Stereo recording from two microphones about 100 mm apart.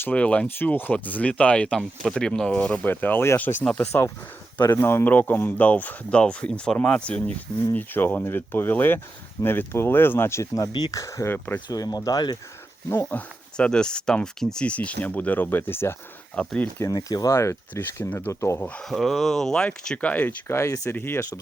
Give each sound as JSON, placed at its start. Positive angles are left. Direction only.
{"t": 0.0, "sound": "speech", "side_deg": 15}
{"t": 4.7, "sound": "speech", "side_deg": 25}
{"t": 10.7, "sound": "speech", "side_deg": 50}
{"t": 10.9, "sound": "speech", "side_deg": 30}
{"t": 11.7, "sound": "speech", "side_deg": 40}
{"t": 12.9, "sound": "speech", "side_deg": 20}
{"t": 16.3, "sound": "speech", "side_deg": 10}
{"t": 16.9, "sound": "speech", "side_deg": 40}
{"t": 17.3, "sound": "speech", "side_deg": 25}
{"t": 18.8, "sound": "speech", "side_deg": 0}
{"t": 20.5, "sound": "speech", "side_deg": 30}
{"t": 20.9, "sound": "speech", "side_deg": 20}